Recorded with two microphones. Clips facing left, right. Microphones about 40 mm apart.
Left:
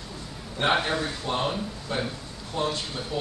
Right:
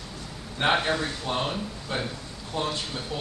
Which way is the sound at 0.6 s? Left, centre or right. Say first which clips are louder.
Even; centre.